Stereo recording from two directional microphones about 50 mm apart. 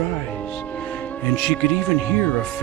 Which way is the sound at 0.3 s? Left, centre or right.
Left.